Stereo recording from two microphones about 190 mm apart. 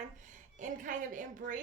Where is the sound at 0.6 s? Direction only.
40° right (ahead or behind).